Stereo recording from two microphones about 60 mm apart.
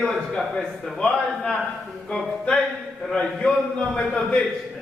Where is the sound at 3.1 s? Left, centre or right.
Centre.